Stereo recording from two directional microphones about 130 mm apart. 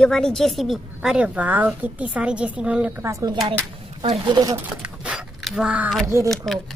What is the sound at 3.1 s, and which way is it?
A woman's voice, 25° right (ahead or behind).